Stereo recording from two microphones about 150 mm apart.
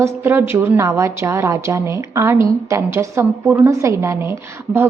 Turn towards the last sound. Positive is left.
turn(degrees=-15)  # may be behind; listen again after turning